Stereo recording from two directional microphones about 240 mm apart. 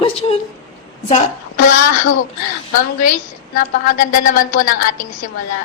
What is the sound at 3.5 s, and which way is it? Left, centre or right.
A woman's voice, left.